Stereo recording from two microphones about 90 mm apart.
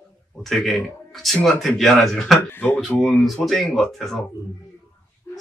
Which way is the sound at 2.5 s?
25° left (ahead or behind).